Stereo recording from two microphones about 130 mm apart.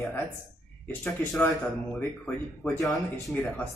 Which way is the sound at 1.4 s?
15° left (ahead or behind).